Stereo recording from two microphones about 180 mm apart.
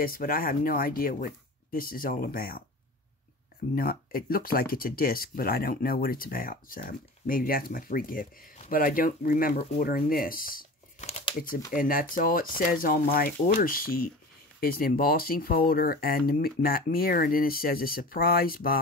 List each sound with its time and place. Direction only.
0.0 s speech: 50° left (ahead or behind)
3.7 s speech: 55° left (ahead or behind)
11.0 s crumpling: 40° left (ahead or behind)
11.7 s speech: 50° left (ahead or behind)